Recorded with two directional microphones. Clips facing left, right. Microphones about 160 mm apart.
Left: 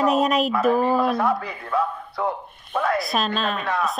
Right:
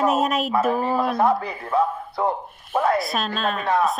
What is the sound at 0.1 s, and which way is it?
Speech, centre (ahead or behind).